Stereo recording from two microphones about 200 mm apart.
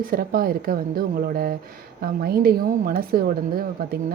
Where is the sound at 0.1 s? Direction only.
45° right (ahead or behind).